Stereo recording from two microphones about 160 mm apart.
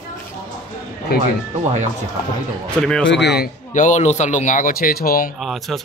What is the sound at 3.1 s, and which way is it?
Speech, 90° left.